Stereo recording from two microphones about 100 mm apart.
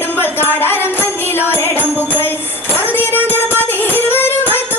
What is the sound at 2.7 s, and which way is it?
Music, 20° left (ahead or behind).